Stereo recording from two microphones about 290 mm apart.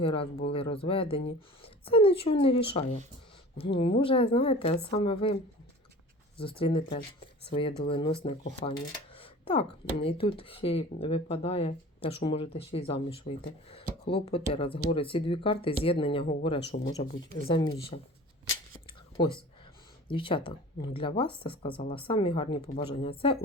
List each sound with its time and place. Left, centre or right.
0.0 s speech: centre
6.6 s speech: centre
16.6 s speech: left
16.9 s speech: centre
18.9 s whispering: centre
20.1 s speech: centre